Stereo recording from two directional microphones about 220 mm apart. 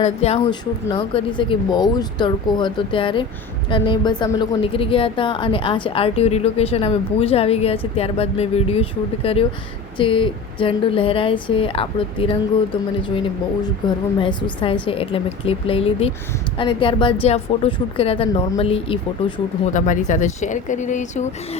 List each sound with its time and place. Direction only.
0.0 s a woman's voice: 30° left (ahead or behind)
13.8 s a woman's voice: 20° left (ahead or behind)